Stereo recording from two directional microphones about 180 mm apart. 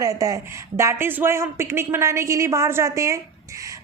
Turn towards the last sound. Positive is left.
turn(degrees=-15)  # may be behind; listen again after turning